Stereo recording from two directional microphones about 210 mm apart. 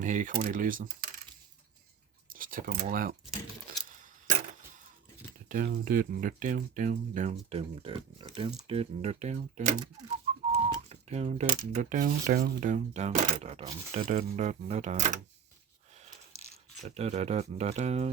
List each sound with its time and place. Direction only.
0.0 s speech: 35° right (ahead or behind)
2.3 s a sound: 40° right (ahead or behind)
2.9 s speech: 40° right (ahead or behind)
3.8 s a sound: 40° right (ahead or behind)
5.8 s speech: 40° right (ahead or behind)
16.8 s speech: 30° right (ahead or behind)